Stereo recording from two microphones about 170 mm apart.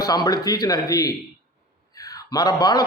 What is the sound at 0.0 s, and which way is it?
A man's voice, 20° left (ahead or behind).